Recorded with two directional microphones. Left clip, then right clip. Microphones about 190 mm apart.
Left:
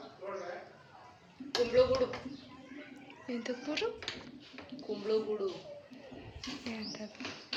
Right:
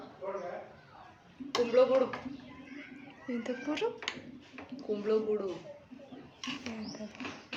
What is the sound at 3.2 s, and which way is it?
Speech, 15° right (ahead or behind).